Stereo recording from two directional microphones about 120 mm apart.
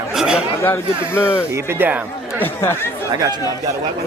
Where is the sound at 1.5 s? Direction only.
20° right (ahead or behind).